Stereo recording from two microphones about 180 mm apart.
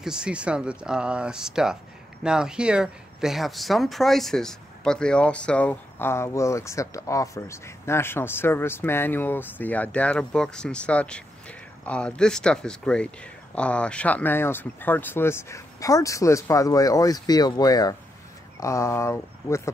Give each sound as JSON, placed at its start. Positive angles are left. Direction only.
{"t": 0.0, "sound": "speech", "side_deg": -5}